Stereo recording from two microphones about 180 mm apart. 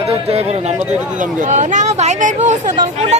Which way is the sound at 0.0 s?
35° right (ahead or behind).